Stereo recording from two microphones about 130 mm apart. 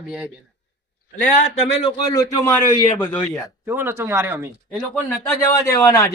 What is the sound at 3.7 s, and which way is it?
Speech, 20° right (ahead or behind).